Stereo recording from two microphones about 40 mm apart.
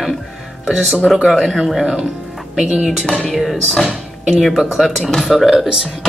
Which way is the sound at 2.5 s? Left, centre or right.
Centre.